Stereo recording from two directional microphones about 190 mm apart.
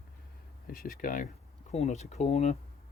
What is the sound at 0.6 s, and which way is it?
Speech, 50° left (ahead or behind).